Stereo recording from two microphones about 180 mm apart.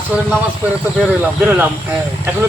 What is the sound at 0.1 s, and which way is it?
Speech, 10° right (ahead or behind).